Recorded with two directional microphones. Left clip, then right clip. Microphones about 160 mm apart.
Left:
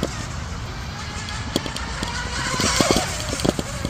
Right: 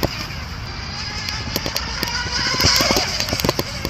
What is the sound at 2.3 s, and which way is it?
Music, 50° left (ahead or behind).